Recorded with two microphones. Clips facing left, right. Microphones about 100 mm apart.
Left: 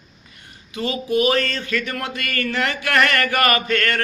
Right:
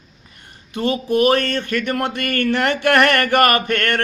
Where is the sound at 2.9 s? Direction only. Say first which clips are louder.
Right 3 dB; 50° right (ahead or behind).